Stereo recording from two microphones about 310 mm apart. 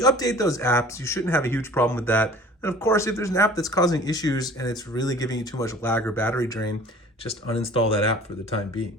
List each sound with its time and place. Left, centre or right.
0.0 s speech: centre